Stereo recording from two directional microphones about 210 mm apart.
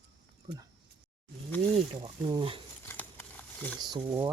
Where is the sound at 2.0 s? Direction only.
20° right (ahead or behind).